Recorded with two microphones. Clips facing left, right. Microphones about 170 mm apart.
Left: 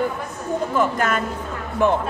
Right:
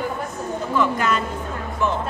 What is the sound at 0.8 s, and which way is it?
A woman's voice, 50° left (ahead or behind).